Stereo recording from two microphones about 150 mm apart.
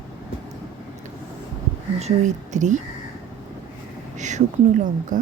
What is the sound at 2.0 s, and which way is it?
Speech, 50° right (ahead or behind).